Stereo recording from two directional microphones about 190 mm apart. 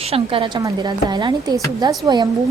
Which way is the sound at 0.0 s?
30° right (ahead or behind).